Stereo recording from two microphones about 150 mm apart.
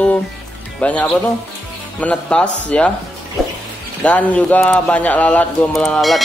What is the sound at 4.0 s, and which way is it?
Speech, 10° left (ahead or behind).